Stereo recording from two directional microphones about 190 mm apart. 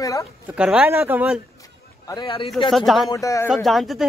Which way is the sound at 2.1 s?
25° left (ahead or behind).